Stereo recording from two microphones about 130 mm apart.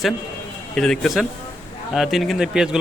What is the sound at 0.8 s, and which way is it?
Speech, 5° left (ahead or behind).